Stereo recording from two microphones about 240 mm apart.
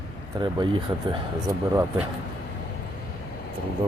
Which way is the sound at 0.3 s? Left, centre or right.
Centre.